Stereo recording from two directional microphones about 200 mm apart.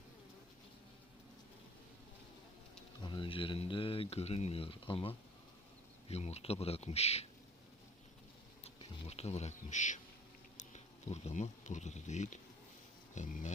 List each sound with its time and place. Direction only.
3.0 s speech: 25° left (ahead or behind)
8.6 s a sound: 30° left (ahead or behind)
10.6 s speech: 35° left (ahead or behind)